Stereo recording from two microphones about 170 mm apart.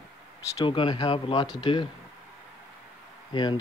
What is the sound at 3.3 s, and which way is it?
Speech, 25° left (ahead or behind).